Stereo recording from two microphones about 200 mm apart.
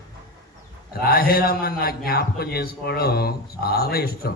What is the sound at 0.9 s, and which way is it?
A man's voice, 50° left (ahead or behind).